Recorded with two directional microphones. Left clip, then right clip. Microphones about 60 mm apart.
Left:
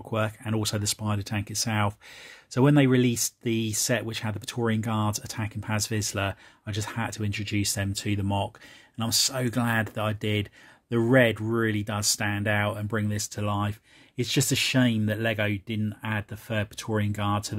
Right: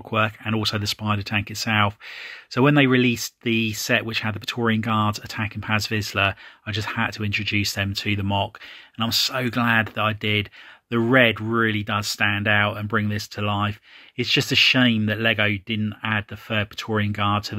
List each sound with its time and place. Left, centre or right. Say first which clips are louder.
0.1 s speech: right 7 dB; centre
0.6 s speech: right 4 dB; left
1.8 s speech: right 7 dB; centre
2.2 s speech: right 4 dB; centre; by 10.5 s left
10.9 s speech: right 4 dB; left
12.3 s speech: right 7 dB; left; by 17.6 s centre